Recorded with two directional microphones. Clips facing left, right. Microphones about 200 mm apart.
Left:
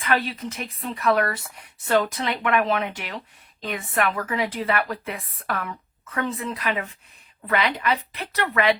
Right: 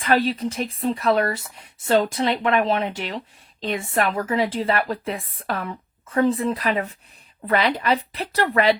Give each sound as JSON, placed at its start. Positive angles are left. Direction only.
{"t": 0.0, "sound": "a woman's voice", "side_deg": -30}